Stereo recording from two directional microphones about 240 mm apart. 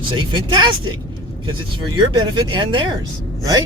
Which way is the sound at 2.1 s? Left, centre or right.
Centre.